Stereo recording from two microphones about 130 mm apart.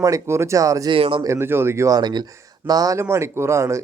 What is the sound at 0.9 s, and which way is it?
Speech, 45° right (ahead or behind).